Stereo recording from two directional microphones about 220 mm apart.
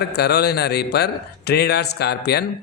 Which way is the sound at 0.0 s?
50° left (ahead or behind).